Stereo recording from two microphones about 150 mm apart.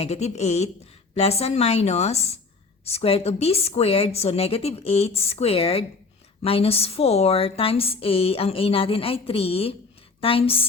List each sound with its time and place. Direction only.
0.0 s a woman's voice: 45° left (ahead or behind)